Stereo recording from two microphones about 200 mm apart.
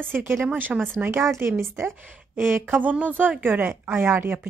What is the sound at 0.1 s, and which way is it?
A woman's voice, 10° right (ahead or behind).